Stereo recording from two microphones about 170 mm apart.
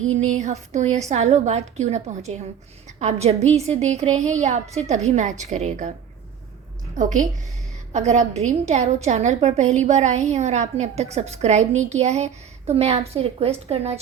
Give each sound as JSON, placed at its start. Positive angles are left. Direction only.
{"t": 0.1, "sound": "a woman's voice", "side_deg": -45}
{"t": 6.9, "sound": "a woman's voice", "side_deg": -50}